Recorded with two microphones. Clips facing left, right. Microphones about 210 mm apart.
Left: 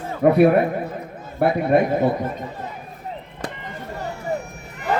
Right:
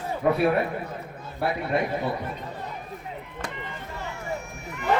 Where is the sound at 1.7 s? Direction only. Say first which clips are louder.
Left 10 dB; 50° left (ahead or behind).